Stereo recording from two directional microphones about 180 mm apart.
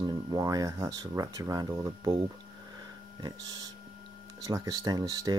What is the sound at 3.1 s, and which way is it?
Speech, 20° right (ahead or behind).